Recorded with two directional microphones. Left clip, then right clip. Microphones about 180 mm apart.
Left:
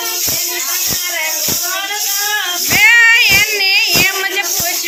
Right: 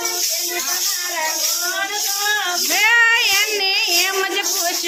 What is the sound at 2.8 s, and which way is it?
Child singing, 40° right (ahead or behind).